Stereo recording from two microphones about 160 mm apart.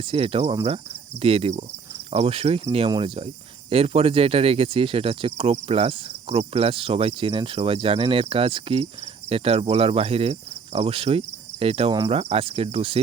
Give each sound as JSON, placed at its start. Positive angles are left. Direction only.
{"t": 0.1, "sound": "speech", "side_deg": -35}